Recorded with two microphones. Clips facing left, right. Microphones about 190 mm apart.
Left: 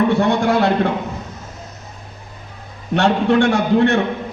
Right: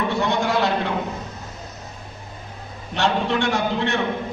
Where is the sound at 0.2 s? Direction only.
55° left (ahead or behind).